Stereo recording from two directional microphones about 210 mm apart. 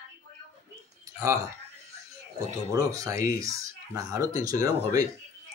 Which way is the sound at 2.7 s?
15° right (ahead or behind).